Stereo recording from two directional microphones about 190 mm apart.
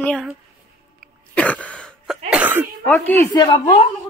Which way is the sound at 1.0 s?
5° left (ahead or behind).